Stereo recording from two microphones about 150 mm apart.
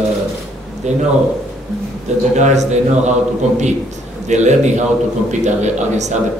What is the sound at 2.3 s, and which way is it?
Speech, 50° right (ahead or behind).